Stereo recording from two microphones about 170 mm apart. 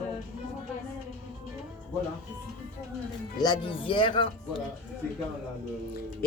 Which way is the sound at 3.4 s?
25° left (ahead or behind).